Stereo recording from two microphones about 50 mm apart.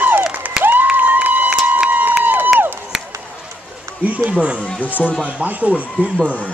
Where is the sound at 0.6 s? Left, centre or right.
Centre.